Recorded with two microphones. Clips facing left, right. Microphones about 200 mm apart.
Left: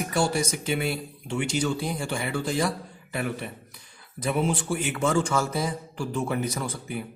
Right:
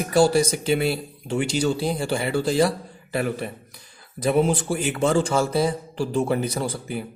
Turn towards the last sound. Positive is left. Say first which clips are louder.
# right 4 dB
turn(degrees=-30)  # may be behind; listen again after turning